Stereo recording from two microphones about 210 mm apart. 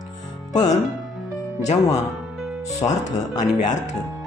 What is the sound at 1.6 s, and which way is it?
Speech, 30° left (ahead or behind).